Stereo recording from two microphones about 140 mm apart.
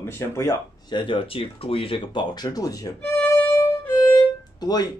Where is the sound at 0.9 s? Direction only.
35° left (ahead or behind).